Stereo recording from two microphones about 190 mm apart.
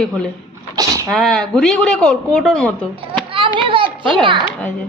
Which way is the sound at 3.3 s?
25° right (ahead or behind).